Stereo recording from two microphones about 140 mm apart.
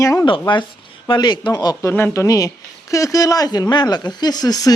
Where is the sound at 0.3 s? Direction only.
35° left (ahead or behind).